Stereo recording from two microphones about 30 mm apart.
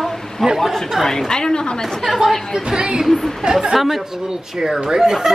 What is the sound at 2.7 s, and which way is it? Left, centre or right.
Speech, right.